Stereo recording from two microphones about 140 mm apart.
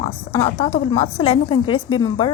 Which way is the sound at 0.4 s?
45° left (ahead or behind).